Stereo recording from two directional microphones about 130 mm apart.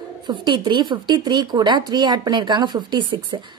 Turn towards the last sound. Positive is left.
turn(degrees=-35)  # may be behind; listen again after turning